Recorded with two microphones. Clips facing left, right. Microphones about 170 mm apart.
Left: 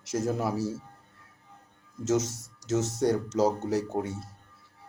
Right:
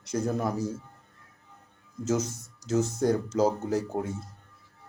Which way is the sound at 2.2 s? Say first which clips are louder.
Right 3 dB; 90° left.